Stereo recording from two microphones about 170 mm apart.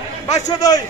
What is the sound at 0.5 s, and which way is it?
Speech, 20° left (ahead or behind).